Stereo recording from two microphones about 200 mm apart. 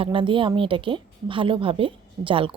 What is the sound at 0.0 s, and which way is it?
A woman's voice, 25° right (ahead or behind).